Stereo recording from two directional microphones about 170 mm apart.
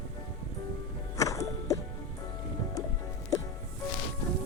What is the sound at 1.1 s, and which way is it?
Music, 20° left (ahead or behind).